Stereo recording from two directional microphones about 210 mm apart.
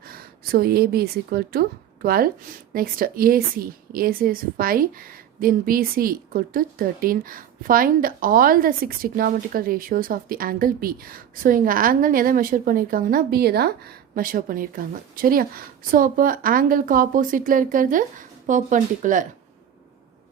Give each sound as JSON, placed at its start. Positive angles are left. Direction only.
{"t": 0.0, "sound": "speech", "side_deg": -45}